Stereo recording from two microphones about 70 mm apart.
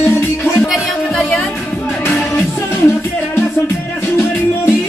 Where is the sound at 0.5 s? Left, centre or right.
Centre.